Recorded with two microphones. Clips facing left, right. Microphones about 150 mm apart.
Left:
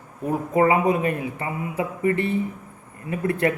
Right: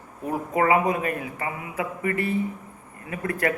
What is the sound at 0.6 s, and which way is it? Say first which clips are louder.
A man's voice: left 2 dB; 25° left (ahead or behind).